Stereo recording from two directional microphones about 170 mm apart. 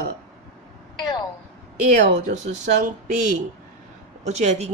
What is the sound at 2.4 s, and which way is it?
Speech, 45° right (ahead or behind).